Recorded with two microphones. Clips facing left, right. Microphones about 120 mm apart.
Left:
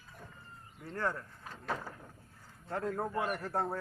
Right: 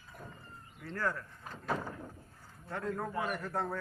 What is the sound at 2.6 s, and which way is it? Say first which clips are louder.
A man's voice: left 2 dB; 30° left (ahead or behind).